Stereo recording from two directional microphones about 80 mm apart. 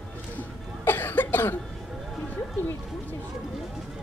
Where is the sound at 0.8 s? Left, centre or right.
Left.